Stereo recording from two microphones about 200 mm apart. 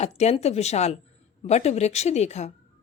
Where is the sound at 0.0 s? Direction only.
35° left (ahead or behind).